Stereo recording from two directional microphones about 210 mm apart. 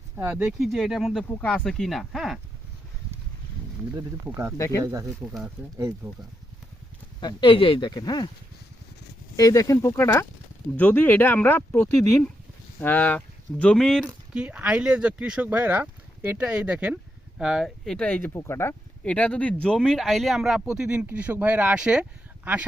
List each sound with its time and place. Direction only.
0.2 s speech: 10° right (ahead or behind)
3.9 s speech: 15° right (ahead or behind)
4.5 s speech: 15° left (ahead or behind)
4.8 s speech: 15° right (ahead or behind)
5.2 s speech: 5° right (ahead or behind)
7.2 s speech: 20° left (ahead or behind)
9.3 s speech: 15° left (ahead or behind); by 22.0 s 5° right (ahead or behind)